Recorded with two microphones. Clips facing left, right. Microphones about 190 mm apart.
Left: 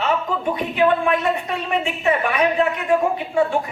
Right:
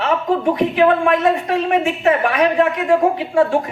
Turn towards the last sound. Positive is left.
turn(degrees=-90)